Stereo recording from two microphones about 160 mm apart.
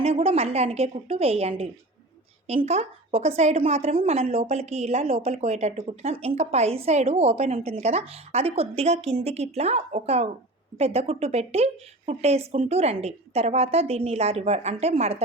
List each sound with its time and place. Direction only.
0.0 s a woman's voice: 40° right (ahead or behind)